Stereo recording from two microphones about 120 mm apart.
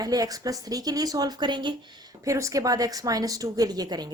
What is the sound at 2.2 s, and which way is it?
A woman's voice, 25° right (ahead or behind).